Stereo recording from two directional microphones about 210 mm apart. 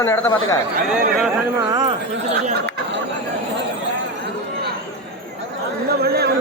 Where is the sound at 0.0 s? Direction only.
15° left (ahead or behind).